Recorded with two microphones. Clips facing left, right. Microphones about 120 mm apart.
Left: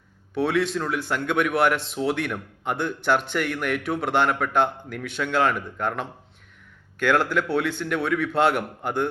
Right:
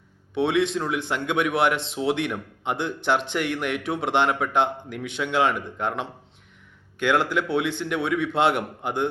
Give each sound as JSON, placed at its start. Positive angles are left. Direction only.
{"t": 0.3, "sound": "speech", "side_deg": -25}